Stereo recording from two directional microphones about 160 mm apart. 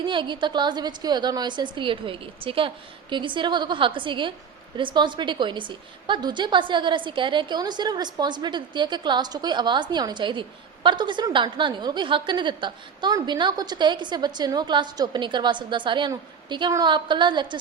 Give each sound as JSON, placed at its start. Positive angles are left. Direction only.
{"t": 0.0, "sound": "a woman's voice", "side_deg": -30}